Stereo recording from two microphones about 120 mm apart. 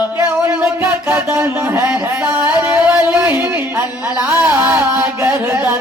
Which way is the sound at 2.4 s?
10° right (ahead or behind).